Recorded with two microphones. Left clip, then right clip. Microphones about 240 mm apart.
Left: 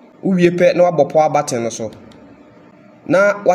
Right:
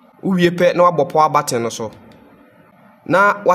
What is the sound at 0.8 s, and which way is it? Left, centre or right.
Speech, centre.